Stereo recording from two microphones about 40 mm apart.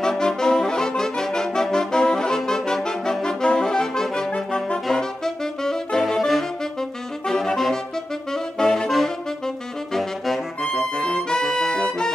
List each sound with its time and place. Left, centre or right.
0.0 s brass instrument: centre
4.8 s saxophone: centre
10.6 s music: centre